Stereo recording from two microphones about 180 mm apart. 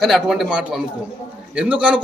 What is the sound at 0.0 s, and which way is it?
A man's voice, centre (ahead or behind).